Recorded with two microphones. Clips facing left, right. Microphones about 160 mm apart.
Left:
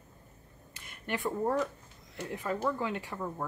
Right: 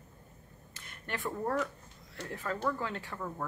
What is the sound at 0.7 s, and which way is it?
Speech, 15° left (ahead or behind).